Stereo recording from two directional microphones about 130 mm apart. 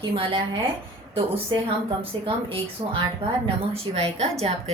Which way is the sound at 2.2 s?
40° right (ahead or behind).